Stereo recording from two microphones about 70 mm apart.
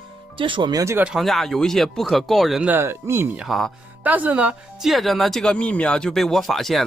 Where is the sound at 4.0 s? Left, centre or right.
Right.